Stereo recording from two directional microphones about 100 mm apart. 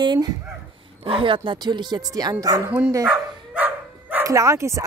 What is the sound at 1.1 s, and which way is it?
Speech, 60° right (ahead or behind).